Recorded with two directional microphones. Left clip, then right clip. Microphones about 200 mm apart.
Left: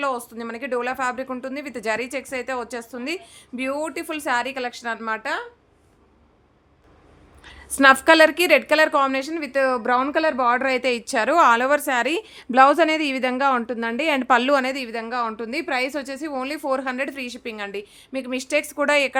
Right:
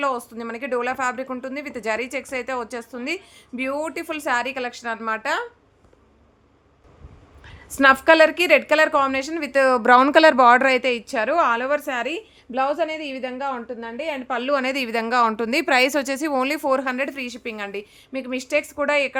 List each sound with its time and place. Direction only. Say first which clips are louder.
0.0 s speech: right 1 dB; 5° right (ahead or behind)
7.4 s speech: left 1 dB; centre (ahead or behind); by 10.7 s 20° right (ahead or behind)
10.7 s a woman's voice: right 2 dB; 5° right (ahead or behind); by 12.2 s 15° left (ahead or behind)
12.3 s a woman's voice: left 10 dB; 30° left (ahead or behind)
14.6 s a woman's voice: right 2 dB; 10° right (ahead or behind)
14.8 s a woman's voice: right 6 dB; 25° right (ahead or behind); by 19.1 s 10° left (ahead or behind)